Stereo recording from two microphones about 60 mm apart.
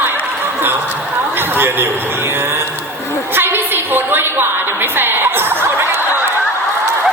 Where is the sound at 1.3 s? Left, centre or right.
Right.